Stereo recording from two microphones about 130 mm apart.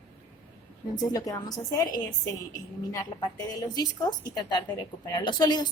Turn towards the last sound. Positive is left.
turn(degrees=35)  # may be behind; listen again after turning